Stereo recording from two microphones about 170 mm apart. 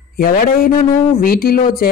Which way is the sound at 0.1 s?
60° left (ahead or behind).